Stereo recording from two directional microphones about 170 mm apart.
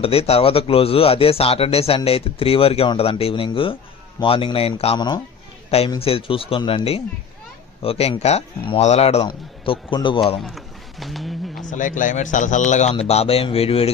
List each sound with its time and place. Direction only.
0.0 s speech: 35° left (ahead or behind)
10.4 s a sound: centre (ahead or behind)
11.6 s a man's voice: 50° left (ahead or behind)